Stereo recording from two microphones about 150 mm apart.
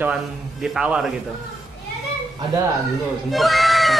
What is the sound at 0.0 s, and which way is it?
Speech, 5° right (ahead or behind).